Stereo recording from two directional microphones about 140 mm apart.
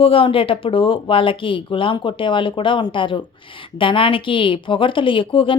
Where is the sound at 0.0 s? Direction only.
40° left (ahead or behind).